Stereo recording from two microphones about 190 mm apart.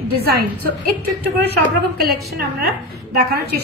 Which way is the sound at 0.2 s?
55° right (ahead or behind).